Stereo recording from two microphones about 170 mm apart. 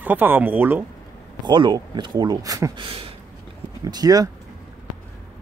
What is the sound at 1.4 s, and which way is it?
Speech, 25° right (ahead or behind).